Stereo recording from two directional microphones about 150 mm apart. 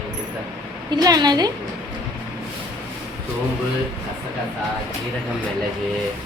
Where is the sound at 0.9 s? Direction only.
25° right (ahead or behind).